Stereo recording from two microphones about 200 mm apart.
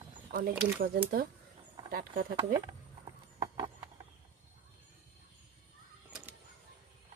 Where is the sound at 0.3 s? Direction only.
50° right (ahead or behind).